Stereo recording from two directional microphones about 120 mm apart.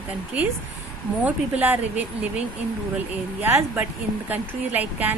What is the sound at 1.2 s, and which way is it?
Speech, 15° right (ahead or behind).